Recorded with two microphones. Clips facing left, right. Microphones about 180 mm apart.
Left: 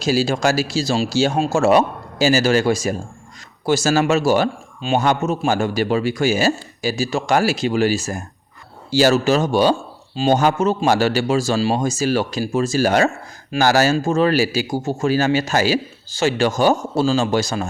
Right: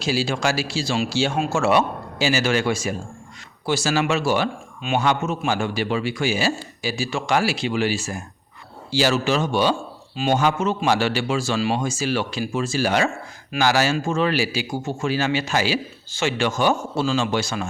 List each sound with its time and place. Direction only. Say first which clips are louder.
0.0 s a man's voice: left 5 dB; 40° left (ahead or behind)